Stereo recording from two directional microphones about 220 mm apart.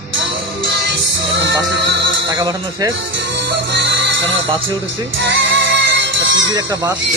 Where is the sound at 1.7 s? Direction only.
50° right (ahead or behind).